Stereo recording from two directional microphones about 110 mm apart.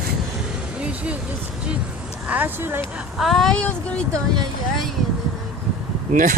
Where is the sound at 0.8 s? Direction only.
10° right (ahead or behind).